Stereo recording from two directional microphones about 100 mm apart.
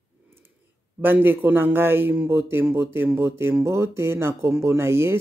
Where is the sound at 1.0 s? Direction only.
20° right (ahead or behind).